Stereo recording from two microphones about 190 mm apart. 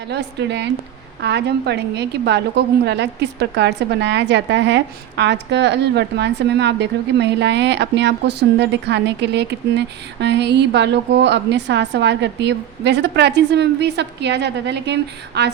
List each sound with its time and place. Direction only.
0.1 s a woman's voice: 65° right (ahead or behind)